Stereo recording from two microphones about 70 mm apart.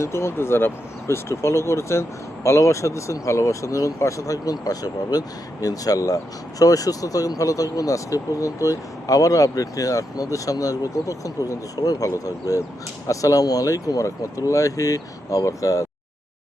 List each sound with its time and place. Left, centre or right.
0.0 s speech: left